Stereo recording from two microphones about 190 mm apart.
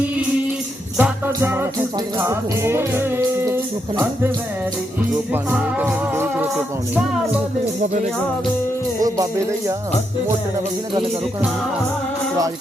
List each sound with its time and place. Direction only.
0.9 s music: 10° right (ahead or behind)
5.3 s music: 10° right (ahead or behind)
7.8 s music: 40° right (ahead or behind)
9.0 s music: 15° right (ahead or behind)